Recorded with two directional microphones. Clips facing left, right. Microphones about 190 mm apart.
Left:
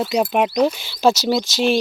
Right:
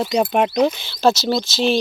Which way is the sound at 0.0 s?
Centre (ahead or behind).